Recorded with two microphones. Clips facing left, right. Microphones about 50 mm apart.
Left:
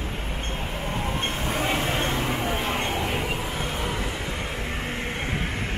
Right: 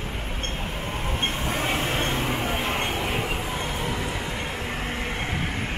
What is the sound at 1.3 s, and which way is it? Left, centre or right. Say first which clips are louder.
Vehicle: left 2 dB; centre.